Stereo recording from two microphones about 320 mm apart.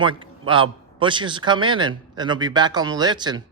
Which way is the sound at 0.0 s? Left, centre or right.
Centre.